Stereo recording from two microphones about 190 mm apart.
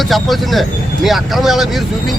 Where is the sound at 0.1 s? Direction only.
Centre (ahead or behind).